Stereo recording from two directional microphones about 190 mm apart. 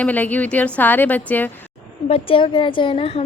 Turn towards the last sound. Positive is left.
turn(degrees=30)  # may be behind; listen again after turning